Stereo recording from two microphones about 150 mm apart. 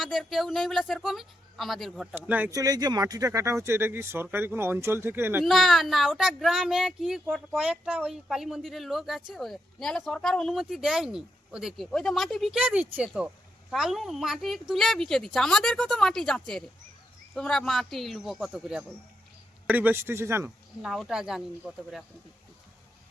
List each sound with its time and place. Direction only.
0.0 s speech: centre (ahead or behind)
2.1 s speech: 10° right (ahead or behind)
2.5 s speech: 25° right (ahead or behind)
5.4 s speech: centre (ahead or behind); by 20.5 s 15° right (ahead or behind)
20.8 s speech: centre (ahead or behind)